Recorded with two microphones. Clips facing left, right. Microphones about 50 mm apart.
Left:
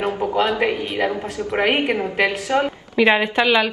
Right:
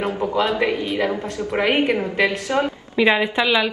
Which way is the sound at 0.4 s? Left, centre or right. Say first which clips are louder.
Even; centre.